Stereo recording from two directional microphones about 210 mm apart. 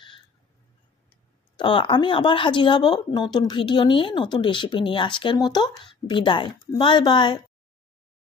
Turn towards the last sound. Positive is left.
turn(degrees=20)  # may be behind; listen again after turning